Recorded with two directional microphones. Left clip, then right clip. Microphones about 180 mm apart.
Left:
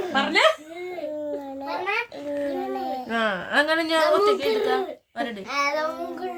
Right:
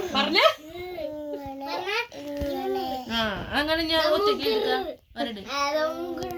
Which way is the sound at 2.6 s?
20° left (ahead or behind).